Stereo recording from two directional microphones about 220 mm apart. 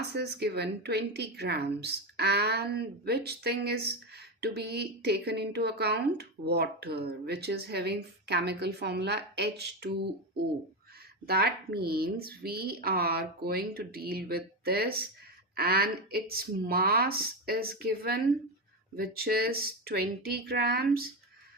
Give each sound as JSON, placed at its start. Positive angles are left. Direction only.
{"t": 0.1, "sound": "a woman's voice", "side_deg": -50}
{"t": 11.3, "sound": "a woman's voice", "side_deg": -45}